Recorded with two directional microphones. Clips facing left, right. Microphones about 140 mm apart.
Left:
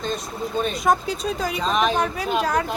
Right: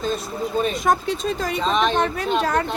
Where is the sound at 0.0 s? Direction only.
5° right (ahead or behind).